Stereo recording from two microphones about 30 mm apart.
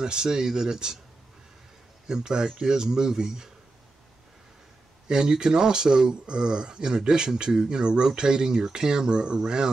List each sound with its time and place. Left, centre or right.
0.0 s speech: right
2.0 s speech: right
5.0 s speech: right